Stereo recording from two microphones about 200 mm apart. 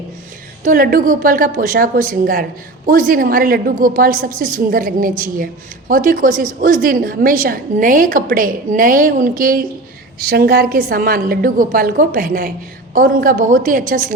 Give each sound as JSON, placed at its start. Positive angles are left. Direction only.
{"t": 0.6, "sound": "a woman's voice", "side_deg": -45}